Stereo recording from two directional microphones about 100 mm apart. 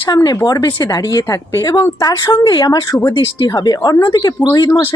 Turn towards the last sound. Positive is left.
turn(degrees=40)  # may be behind; listen again after turning